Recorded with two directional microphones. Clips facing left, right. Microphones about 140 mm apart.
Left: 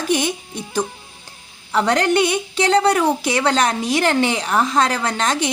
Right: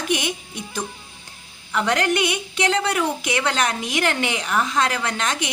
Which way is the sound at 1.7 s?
35° left (ahead or behind).